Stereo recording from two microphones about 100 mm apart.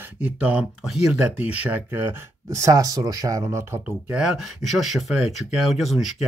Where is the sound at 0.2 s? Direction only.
10° right (ahead or behind); by 3.8 s 30° right (ahead or behind).